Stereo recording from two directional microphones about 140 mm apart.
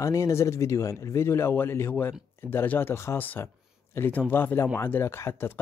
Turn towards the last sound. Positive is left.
turn(degrees=15)  # may be behind; listen again after turning